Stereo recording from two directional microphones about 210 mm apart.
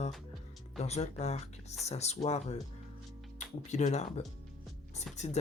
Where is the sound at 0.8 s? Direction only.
30° left (ahead or behind).